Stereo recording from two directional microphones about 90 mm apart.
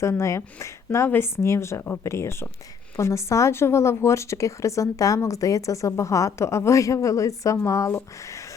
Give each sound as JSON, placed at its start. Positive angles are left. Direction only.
{"t": 0.0, "sound": "speech", "side_deg": 30}